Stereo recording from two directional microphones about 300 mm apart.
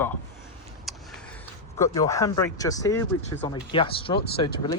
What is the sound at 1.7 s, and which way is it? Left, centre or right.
Speech, centre.